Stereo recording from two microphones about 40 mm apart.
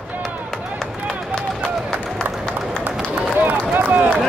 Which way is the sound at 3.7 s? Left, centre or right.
Right.